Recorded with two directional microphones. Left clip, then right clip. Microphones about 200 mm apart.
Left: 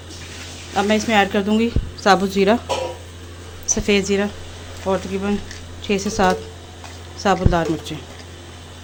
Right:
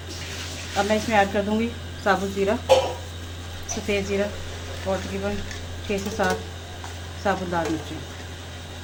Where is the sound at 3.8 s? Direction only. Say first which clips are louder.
Left 5 dB; 65° left (ahead or behind).